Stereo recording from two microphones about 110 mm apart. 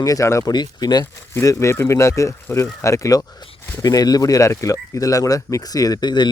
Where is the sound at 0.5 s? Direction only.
40° left (ahead or behind).